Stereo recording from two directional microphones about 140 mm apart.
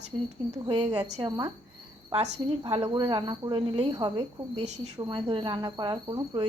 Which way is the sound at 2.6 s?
40° right (ahead or behind).